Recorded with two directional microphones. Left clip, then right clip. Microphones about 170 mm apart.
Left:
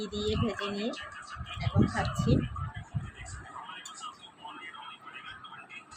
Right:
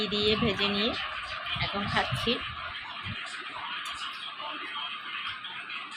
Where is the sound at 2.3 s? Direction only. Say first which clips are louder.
Left 3 dB; 40° left (ahead or behind).